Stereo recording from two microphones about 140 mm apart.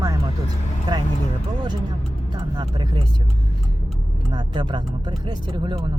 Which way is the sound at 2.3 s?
35° right (ahead or behind).